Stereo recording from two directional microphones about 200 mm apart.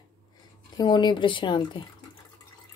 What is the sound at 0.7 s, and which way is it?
Speech, 20° left (ahead or behind).